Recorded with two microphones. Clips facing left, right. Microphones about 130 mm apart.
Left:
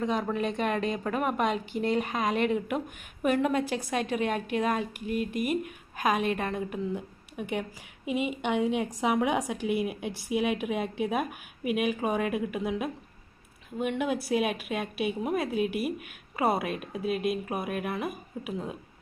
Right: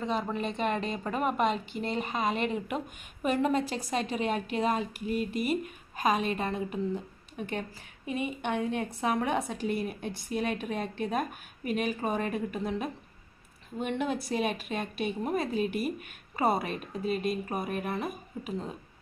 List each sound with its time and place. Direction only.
0.0 s speech: 10° left (ahead or behind)
2.3 s speech: 60° left (ahead or behind)
2.7 s a woman's voice: 5° left (ahead or behind)